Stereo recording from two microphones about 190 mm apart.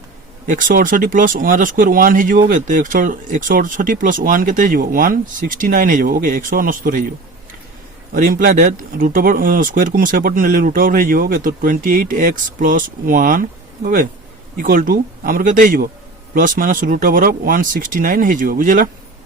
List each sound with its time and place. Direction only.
0.4 s speech: 45° right (ahead or behind)
8.1 s speech: 45° right (ahead or behind)